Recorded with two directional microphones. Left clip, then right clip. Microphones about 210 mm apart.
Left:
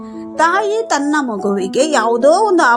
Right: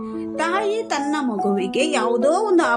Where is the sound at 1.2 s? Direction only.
20° left (ahead or behind).